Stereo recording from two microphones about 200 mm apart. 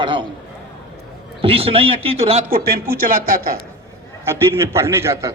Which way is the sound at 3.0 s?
45° right (ahead or behind).